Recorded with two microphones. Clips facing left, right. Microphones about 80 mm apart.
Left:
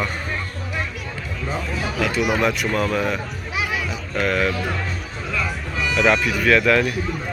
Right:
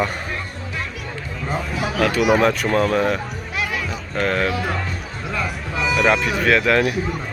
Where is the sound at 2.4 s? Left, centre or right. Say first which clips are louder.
Right 3 dB; right.